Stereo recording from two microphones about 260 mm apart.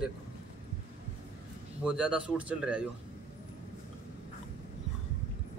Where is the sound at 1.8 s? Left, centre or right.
Centre.